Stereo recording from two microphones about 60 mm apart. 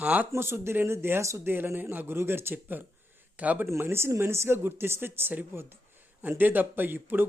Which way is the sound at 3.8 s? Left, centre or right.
Right.